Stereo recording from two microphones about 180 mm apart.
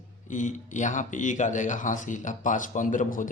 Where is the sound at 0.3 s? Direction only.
45° left (ahead or behind).